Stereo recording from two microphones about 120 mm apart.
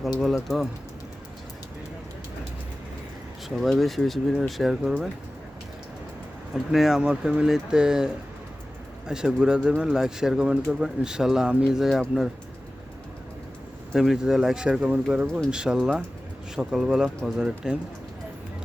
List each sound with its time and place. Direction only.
0.4 s speech: centre (ahead or behind)
3.5 s speech: centre (ahead or behind)
6.5 s speech: 5° right (ahead or behind)
13.9 s speech: 5° right (ahead or behind)